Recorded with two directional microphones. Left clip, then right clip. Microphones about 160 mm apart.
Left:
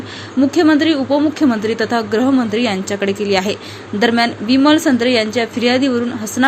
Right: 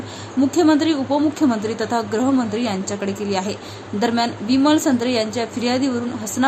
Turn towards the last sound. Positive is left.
turn(degrees=10)  # may be behind; listen again after turning